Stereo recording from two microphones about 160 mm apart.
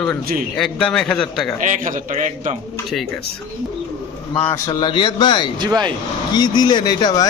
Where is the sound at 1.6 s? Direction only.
55° right (ahead or behind).